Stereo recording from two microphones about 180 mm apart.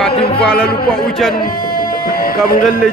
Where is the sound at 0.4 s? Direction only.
5° left (ahead or behind).